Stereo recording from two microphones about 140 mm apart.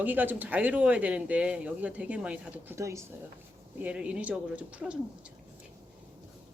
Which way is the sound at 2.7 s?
20° right (ahead or behind).